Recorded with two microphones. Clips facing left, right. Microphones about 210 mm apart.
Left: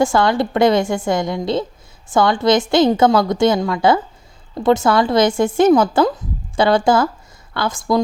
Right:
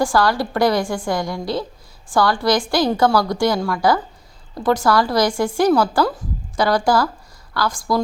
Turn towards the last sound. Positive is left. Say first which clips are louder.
# left 2 dB
turn(degrees=20)  # may be behind; listen again after turning